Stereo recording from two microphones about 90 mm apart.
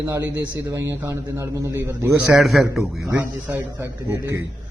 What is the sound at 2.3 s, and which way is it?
Speech, centre (ahead or behind).